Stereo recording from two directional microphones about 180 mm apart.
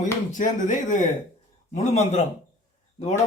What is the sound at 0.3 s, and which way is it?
Speech, 45° left (ahead or behind).